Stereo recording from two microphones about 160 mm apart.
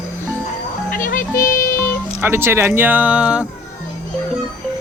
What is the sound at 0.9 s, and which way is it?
Music, 60° left (ahead or behind).